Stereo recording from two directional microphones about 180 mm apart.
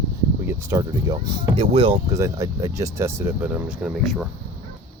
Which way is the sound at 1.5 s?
30° right (ahead or behind).